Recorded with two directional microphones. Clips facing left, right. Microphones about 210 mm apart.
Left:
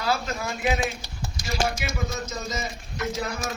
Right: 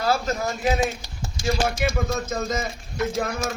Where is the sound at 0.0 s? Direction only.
45° right (ahead or behind).